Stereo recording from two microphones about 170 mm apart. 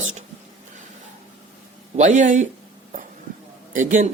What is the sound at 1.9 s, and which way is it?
Speech, 45° right (ahead or behind).